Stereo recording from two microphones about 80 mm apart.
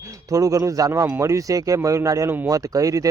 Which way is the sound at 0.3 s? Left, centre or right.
Right.